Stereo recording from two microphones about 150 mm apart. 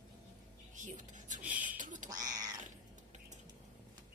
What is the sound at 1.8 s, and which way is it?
Bird, 60° right (ahead or behind).